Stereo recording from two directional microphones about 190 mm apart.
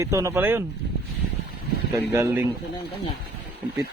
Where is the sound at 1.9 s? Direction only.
15° right (ahead or behind).